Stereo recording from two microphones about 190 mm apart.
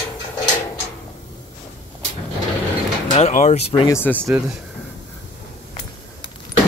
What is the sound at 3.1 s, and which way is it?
Speech, 35° left (ahead or behind).